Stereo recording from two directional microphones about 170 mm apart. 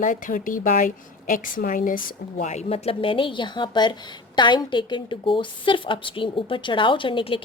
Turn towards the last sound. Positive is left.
turn(degrees=30)  # may be behind; listen again after turning